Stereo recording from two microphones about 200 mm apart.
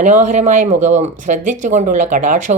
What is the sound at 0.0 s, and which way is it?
Speech, 35° right (ahead or behind).